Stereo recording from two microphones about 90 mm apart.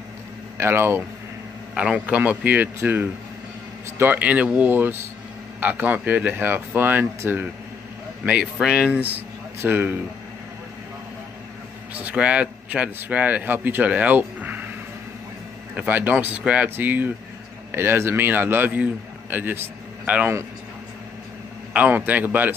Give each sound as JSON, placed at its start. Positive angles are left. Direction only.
{"t": 0.6, "sound": "speech", "side_deg": -25}
{"t": 1.8, "sound": "a man's voice", "side_deg": -15}
{"t": 8.5, "sound": "a man's voice", "side_deg": -10}
{"t": 11.9, "sound": "a man's voice", "side_deg": -15}
{"t": 15.7, "sound": "speech", "side_deg": -20}
{"t": 21.7, "sound": "speech", "side_deg": -20}